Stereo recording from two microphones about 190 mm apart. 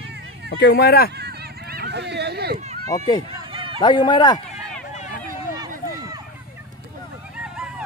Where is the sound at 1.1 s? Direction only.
60° right (ahead or behind).